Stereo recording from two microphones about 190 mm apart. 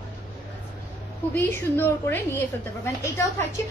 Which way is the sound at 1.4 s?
10° left (ahead or behind).